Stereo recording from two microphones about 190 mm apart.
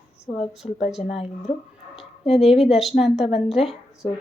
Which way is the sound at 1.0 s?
35° left (ahead or behind).